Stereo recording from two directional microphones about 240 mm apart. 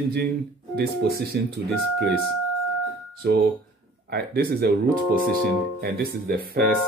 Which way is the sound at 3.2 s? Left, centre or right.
Right.